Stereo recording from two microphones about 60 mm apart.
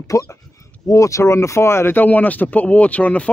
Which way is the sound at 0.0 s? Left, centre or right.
Left.